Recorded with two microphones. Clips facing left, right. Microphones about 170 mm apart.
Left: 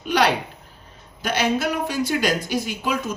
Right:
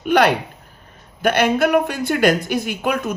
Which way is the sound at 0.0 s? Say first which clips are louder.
Right 5 dB; 55° right (ahead or behind).